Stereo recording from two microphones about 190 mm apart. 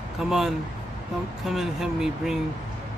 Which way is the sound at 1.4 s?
Centre (ahead or behind).